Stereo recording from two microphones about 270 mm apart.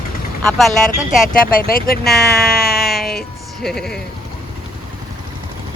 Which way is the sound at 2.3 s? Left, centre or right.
Left.